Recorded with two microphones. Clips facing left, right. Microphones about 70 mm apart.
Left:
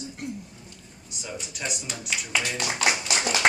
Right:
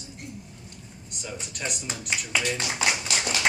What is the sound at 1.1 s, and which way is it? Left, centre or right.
Speech, centre.